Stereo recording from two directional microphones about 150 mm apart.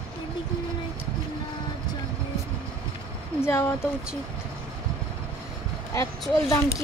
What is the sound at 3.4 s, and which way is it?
Speech, 15° left (ahead or behind).